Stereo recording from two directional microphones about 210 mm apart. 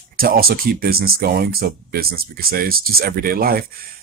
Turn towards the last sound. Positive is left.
turn(degrees=-45)  # may be behind; listen again after turning